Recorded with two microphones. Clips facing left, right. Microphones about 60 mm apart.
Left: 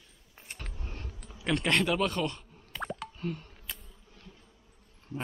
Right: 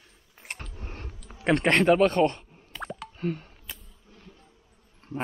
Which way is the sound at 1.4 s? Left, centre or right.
Right.